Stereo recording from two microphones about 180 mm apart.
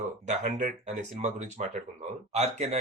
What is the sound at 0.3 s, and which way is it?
Speech, 40° right (ahead or behind).